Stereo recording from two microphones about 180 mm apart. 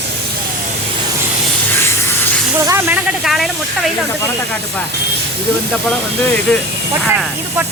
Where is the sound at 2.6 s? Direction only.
15° right (ahead or behind).